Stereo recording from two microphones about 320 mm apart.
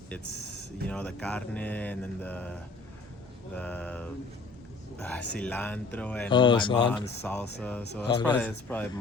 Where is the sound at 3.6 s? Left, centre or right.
Centre.